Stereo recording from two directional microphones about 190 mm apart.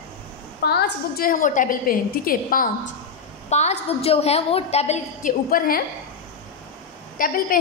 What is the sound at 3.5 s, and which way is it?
A woman's voice, 35° left (ahead or behind).